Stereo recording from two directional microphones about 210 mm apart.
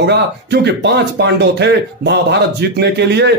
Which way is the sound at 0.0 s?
55° right (ahead or behind).